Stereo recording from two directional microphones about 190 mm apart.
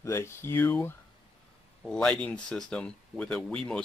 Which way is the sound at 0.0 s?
15° left (ahead or behind).